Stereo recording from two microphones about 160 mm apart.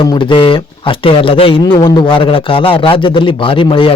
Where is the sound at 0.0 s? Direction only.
30° left (ahead or behind).